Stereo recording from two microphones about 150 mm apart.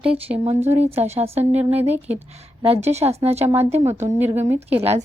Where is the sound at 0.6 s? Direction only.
15° right (ahead or behind).